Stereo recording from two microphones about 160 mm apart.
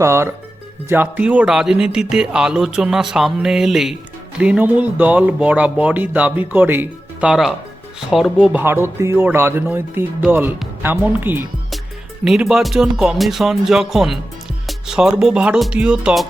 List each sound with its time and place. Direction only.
0.0 s speech: 15° right (ahead or behind)